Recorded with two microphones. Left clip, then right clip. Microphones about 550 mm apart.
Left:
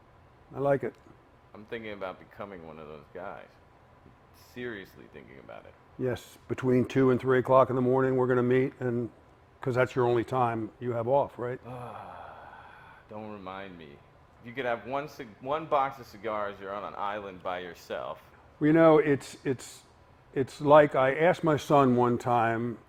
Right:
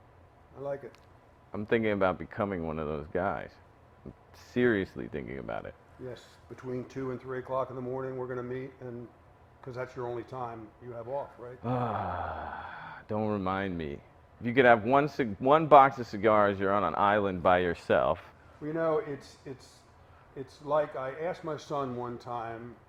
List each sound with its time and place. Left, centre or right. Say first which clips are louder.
0.5 s a man's voice: left 10 dB; left
1.5 s speech: right 11 dB; right
4.5 s speech: right 12 dB; right
6.6 s speech: left 12 dB; left
11.6 s speech: right 10 dB; right
18.7 s speech: left 9 dB; left
20.4 s speech: left 10 dB; left